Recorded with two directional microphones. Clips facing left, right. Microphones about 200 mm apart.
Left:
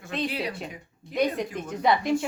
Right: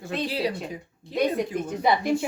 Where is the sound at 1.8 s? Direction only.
10° right (ahead or behind).